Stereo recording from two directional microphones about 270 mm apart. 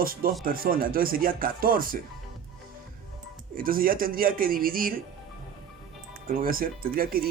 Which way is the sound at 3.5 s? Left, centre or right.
Right.